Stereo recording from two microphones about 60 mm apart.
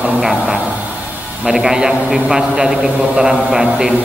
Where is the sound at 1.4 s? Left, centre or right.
Centre.